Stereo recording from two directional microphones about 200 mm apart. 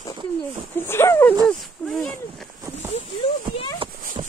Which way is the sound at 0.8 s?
10° left (ahead or behind).